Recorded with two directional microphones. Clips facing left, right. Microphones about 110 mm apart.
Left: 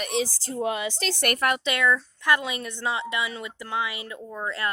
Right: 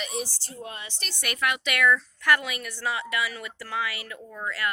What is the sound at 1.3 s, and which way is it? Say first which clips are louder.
Speech: left 2 dB; 40° left (ahead or behind).